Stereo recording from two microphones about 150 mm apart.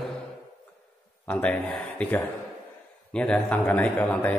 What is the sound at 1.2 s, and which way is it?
A man's voice, 10° left (ahead or behind).